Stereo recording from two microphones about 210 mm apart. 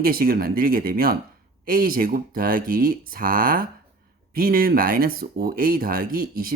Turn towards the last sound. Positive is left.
turn(degrees=-45)  # may be behind; listen again after turning